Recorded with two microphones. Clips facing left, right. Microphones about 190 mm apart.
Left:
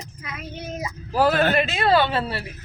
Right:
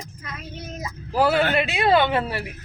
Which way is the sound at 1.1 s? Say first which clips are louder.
Left 1 dB; 15° right (ahead or behind).